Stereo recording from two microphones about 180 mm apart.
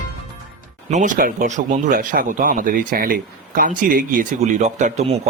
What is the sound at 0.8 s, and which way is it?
Speech, 45° right (ahead or behind).